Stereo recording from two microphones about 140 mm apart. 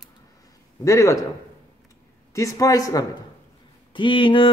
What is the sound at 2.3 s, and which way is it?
Speech, 25° left (ahead or behind).